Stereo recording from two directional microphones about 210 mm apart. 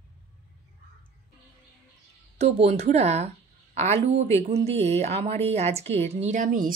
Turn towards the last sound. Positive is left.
turn(degrees=-40)  # may be behind; listen again after turning